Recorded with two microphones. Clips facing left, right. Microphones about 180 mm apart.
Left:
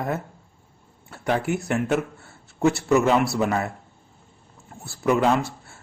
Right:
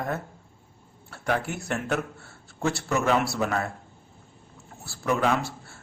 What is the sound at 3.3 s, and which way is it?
Speech, 15° left (ahead or behind).